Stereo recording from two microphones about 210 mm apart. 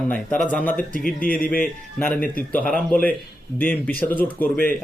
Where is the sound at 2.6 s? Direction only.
40° left (ahead or behind).